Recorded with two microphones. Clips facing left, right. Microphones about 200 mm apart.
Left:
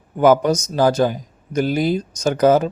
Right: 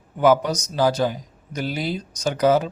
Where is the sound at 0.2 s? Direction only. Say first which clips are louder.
Left 4 dB; 50° left (ahead or behind).